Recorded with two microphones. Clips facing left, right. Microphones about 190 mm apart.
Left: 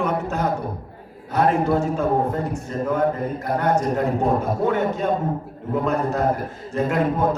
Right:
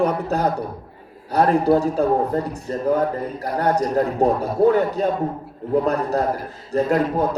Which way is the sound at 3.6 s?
35° right (ahead or behind).